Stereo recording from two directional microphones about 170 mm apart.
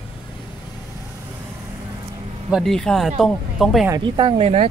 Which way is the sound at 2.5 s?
Centre (ahead or behind).